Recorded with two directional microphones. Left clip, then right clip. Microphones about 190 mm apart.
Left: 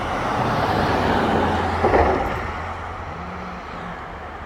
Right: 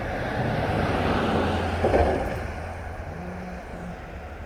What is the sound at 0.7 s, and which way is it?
Vehicle, 25° left (ahead or behind).